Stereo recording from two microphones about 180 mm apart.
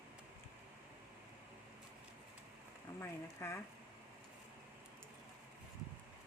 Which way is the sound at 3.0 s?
15° left (ahead or behind).